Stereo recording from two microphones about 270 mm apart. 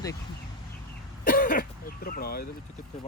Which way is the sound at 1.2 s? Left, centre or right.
Left.